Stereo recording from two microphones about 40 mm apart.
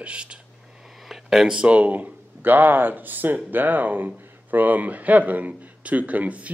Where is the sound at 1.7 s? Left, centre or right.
Right.